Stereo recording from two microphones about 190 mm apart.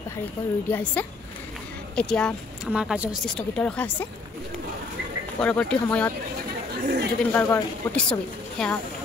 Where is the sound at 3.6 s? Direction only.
5° left (ahead or behind).